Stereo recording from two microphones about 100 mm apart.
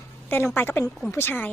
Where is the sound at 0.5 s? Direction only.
20° left (ahead or behind).